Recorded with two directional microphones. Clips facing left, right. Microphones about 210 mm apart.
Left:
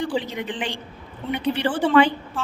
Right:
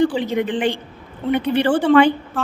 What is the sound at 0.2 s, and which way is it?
A woman's voice, 55° right (ahead or behind).